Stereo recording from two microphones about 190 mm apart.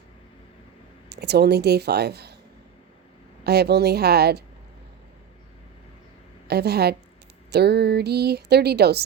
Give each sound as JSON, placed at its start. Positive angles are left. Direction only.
{"t": 1.1, "sound": "a woman's voice", "side_deg": -60}
{"t": 3.4, "sound": "a woman's voice", "side_deg": -60}
{"t": 6.5, "sound": "a woman's voice", "side_deg": -60}